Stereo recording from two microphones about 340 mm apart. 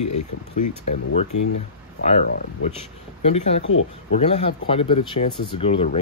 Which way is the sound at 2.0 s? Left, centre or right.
Left.